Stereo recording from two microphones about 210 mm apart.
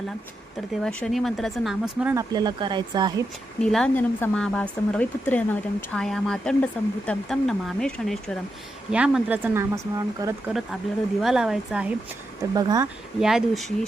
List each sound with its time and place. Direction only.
0.8 s speech: 5° left (ahead or behind)
2.3 s speech: 20° right (ahead or behind)
3.6 s speech: 5° left (ahead or behind); by 10.3 s 15° right (ahead or behind)
11.2 s speech: centre (ahead or behind)
12.5 s speech: 15° right (ahead or behind)
13.1 s speech: centre (ahead or behind)